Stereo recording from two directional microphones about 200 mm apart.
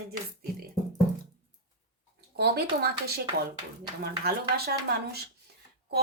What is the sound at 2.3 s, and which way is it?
Speech, 55° right (ahead or behind).